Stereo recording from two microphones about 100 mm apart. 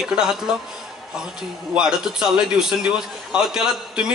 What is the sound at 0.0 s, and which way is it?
Speech, 5° right (ahead or behind).